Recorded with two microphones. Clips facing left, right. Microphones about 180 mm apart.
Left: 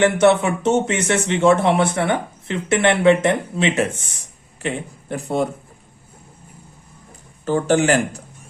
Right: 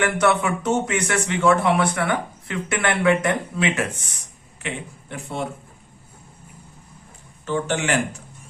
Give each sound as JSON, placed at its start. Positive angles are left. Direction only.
{"t": 0.0, "sound": "speech", "side_deg": 25}
{"t": 4.6, "sound": "speech", "side_deg": 40}
{"t": 7.4, "sound": "speech", "side_deg": 40}